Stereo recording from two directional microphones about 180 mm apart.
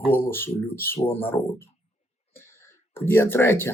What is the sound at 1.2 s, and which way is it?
Speech, 10° left (ahead or behind).